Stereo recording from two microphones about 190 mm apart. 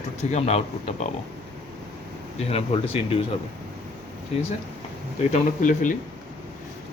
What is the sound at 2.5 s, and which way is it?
Speech, 30° left (ahead or behind).